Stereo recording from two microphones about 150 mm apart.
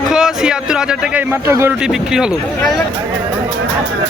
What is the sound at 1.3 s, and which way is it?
Speech, 15° right (ahead or behind).